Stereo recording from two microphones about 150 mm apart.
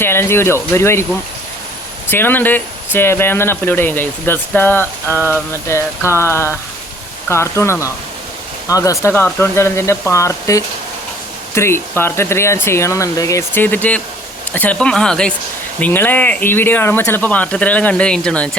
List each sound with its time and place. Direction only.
0.0 s speech: 15° left (ahead or behind)
2.0 s speech: 15° left (ahead or behind)